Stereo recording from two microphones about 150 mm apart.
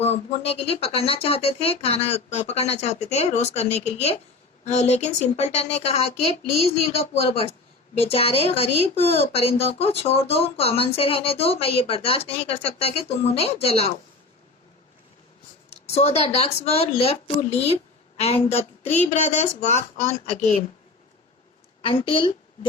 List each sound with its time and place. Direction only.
0.0 s speech: 45° left (ahead or behind)
15.7 s a woman's voice: 45° left (ahead or behind)
21.8 s a woman's voice: 35° left (ahead or behind)